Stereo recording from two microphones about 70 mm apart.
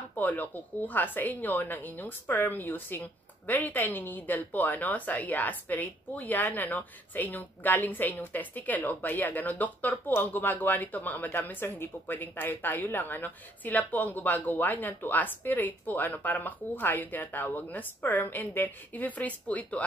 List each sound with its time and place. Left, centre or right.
0.1 s a woman's voice: left